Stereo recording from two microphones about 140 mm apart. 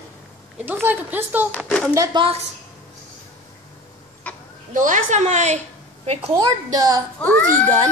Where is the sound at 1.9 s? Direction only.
25° right (ahead or behind).